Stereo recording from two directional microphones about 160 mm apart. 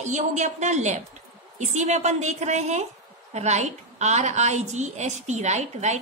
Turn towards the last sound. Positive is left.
turn(degrees=-45)  # may be behind; listen again after turning